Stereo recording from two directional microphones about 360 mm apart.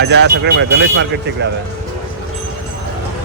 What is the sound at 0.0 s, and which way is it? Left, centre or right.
Speech, right.